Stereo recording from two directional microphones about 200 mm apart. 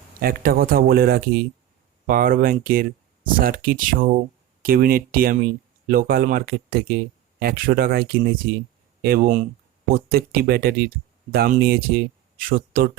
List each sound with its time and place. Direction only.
0.2 s speech: 50° right (ahead or behind)